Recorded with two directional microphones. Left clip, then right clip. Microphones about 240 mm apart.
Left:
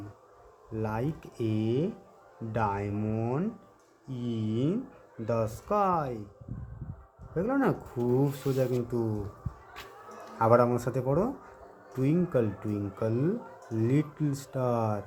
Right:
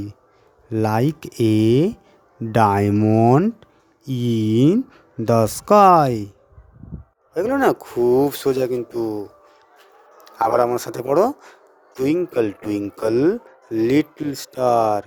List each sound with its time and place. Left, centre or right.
0.7 s speech: right
7.3 s speech: right
10.3 s speech: right